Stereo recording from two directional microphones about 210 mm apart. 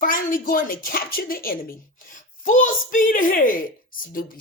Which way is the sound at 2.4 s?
40° left (ahead or behind).